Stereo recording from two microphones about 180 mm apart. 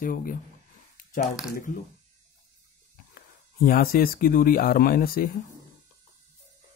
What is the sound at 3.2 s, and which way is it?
Speech, 55° left (ahead or behind).